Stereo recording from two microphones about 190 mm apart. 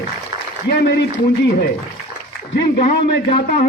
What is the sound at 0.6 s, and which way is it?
Speech, 65° left (ahead or behind).